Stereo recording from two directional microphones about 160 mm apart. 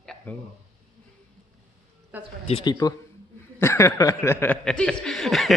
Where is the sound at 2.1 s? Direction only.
10° right (ahead or behind).